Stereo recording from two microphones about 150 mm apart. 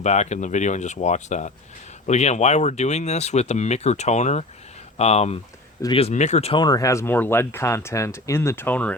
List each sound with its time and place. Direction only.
0.0 s speech: 50° left (ahead or behind)
6.5 s speech: 25° left (ahead or behind); by 9.0 s 10° left (ahead or behind)